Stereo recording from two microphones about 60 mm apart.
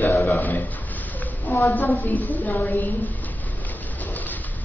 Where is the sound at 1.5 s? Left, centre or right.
Left.